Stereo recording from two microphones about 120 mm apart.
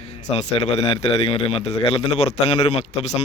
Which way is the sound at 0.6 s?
50° left (ahead or behind).